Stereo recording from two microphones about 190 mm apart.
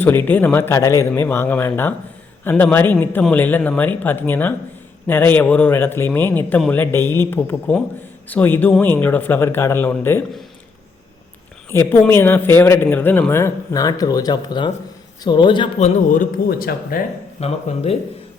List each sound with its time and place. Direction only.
0.0 s speech: 10° left (ahead or behind)
11.7 s a man's voice: 15° left (ahead or behind)
16.0 s speech: 45° left (ahead or behind)
17.4 s speech: 35° left (ahead or behind)